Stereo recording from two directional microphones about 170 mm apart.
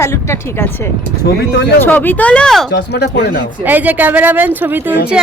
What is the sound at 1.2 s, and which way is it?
Speech, 80° left.